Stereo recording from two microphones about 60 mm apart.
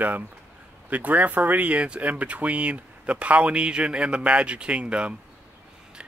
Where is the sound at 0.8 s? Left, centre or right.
Right.